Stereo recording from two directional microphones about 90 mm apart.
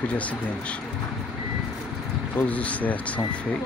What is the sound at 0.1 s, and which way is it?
Speech, 15° left (ahead or behind).